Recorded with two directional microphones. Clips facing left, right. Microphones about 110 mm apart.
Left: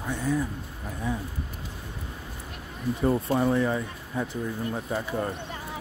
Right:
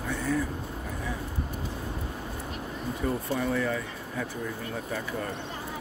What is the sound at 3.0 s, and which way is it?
Speech, 35° left (ahead or behind).